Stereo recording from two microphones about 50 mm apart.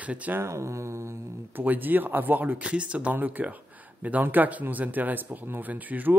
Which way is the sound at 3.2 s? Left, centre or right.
Right.